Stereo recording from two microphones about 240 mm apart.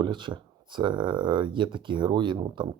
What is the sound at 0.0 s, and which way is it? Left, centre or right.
Speech, centre.